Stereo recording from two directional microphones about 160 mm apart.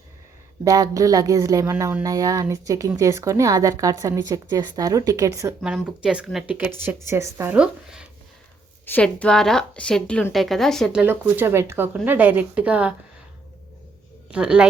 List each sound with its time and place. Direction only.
0.6 s a woman's voice: 20° right (ahead or behind)
5.6 s a woman's voice: 5° right (ahead or behind)
8.9 s a woman's voice: 10° left (ahead or behind)
11.0 s a woman's voice: 15° right (ahead or behind)
14.3 s speech: 5° right (ahead or behind)